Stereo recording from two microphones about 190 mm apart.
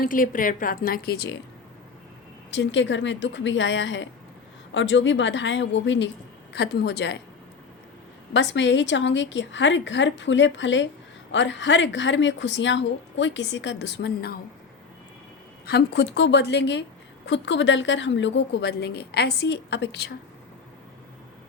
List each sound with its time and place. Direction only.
0.0 s a woman's voice: 45° left (ahead or behind)
2.5 s a woman's voice: 70° left (ahead or behind)
6.5 s a woman's voice: 60° left (ahead or behind)
8.3 s a woman's voice: 70° left (ahead or behind)
15.6 s a woman's voice: 60° left (ahead or behind)